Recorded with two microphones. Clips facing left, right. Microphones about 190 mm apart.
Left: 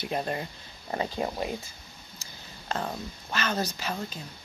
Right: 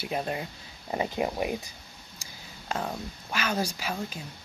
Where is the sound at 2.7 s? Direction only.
5° right (ahead or behind).